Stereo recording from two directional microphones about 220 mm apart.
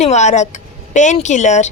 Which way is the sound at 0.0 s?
30° left (ahead or behind).